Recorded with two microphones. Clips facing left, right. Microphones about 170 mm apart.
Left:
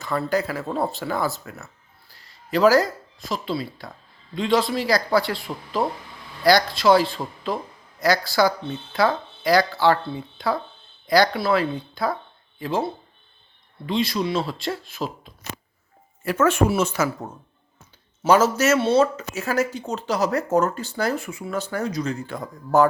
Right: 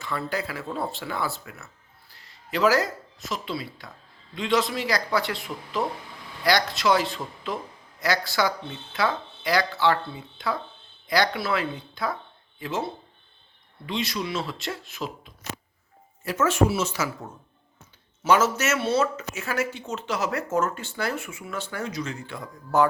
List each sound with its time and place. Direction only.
0.0 s speech: 40° left (ahead or behind)
13.8 s speech: 35° left (ahead or behind)
16.2 s speech: 55° left (ahead or behind)
18.2 s speech: 35° left (ahead or behind)